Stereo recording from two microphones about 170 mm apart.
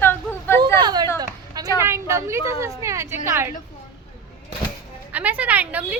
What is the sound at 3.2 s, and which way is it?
Speech, 15° right (ahead or behind).